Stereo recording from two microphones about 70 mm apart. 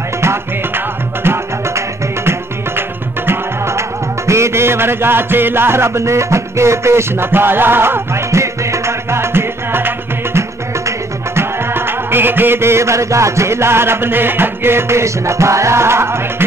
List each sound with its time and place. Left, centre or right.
0.2 s music: right
3.3 s music: right